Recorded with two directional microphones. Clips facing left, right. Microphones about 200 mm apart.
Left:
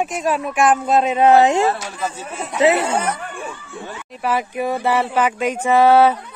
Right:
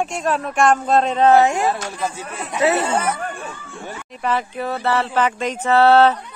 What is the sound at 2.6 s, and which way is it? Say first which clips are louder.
Speech: left 2 dB; 15° left (ahead or behind).